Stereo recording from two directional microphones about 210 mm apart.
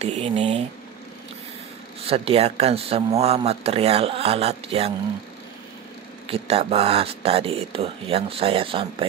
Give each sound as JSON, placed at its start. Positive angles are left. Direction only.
{"t": 0.0, "sound": "speech", "side_deg": -30}
{"t": 2.0, "sound": "speech", "side_deg": -30}
{"t": 6.2, "sound": "speech", "side_deg": -25}